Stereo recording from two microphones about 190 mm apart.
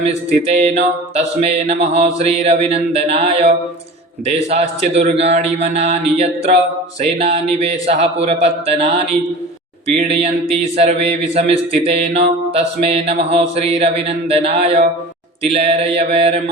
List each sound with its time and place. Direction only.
0.0 s a man's voice: 35° right (ahead or behind)
10.2 s a man's voice: 35° right (ahead or behind)